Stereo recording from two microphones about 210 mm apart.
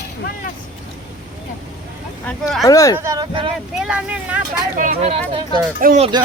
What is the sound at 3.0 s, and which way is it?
Speech, 15° right (ahead or behind).